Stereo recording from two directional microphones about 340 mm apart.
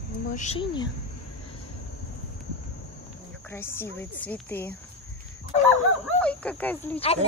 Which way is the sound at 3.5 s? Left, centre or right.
Centre.